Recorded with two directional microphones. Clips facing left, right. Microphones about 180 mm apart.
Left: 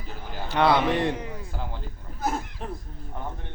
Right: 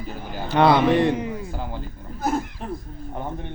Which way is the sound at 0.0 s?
10° right (ahead or behind).